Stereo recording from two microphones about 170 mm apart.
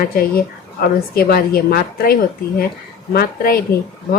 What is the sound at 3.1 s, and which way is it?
Speech, 60° left (ahead or behind).